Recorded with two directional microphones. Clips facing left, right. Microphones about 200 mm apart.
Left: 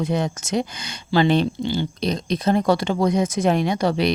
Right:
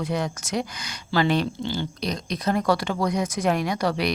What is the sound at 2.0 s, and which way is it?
Speech, 25° left (ahead or behind).